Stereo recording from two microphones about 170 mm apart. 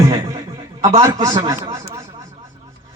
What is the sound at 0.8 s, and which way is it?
Speech, 20° right (ahead or behind).